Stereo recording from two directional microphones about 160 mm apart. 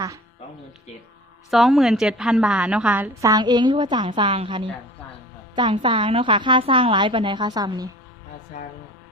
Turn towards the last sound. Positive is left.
turn(degrees=-25)  # may be behind; listen again after turning